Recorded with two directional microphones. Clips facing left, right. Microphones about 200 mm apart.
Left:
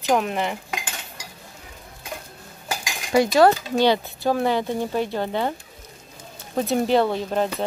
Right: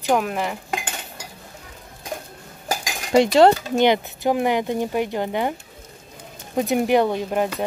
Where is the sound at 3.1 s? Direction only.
25° right (ahead or behind).